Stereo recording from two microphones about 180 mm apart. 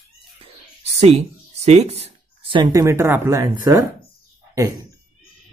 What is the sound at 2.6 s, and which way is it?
Speech, 20° right (ahead or behind).